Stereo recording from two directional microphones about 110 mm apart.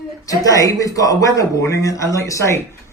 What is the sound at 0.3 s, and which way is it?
Speech, 30° left (ahead or behind).